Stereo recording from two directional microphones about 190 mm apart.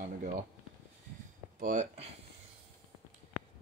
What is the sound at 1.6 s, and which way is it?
Speech, 45° right (ahead or behind).